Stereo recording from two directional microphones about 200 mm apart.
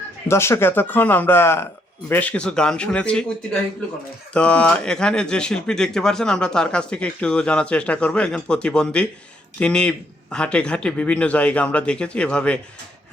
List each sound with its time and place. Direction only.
0.3 s speech: 15° left (ahead or behind)